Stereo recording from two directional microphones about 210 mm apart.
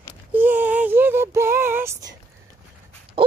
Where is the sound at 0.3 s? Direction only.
10° right (ahead or behind).